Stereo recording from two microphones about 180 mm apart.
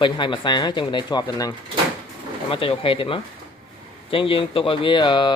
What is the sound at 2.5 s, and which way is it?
Speech, 30° left (ahead or behind).